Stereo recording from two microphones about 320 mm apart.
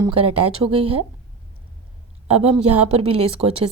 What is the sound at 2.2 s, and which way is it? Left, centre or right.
Speech, centre.